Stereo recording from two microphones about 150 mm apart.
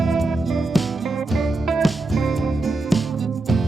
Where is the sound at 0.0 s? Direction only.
Centre (ahead or behind).